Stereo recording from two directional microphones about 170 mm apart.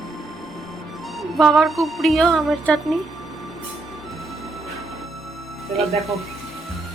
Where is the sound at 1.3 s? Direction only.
Centre (ahead or behind).